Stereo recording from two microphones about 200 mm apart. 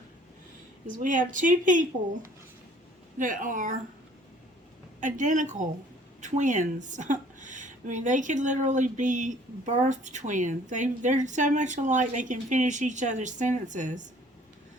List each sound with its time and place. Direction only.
0.9 s a woman's voice: 40° right (ahead or behind)
3.2 s a woman's voice: 40° right (ahead or behind)
4.9 s a woman's voice: 40° right (ahead or behind)